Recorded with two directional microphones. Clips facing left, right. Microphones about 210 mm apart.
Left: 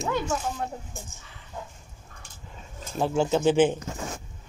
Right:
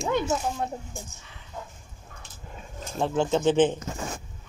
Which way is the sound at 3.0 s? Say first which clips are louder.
Left 1 dB; 5° left (ahead or behind).